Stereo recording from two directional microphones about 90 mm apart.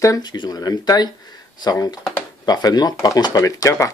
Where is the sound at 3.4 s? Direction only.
40° left (ahead or behind).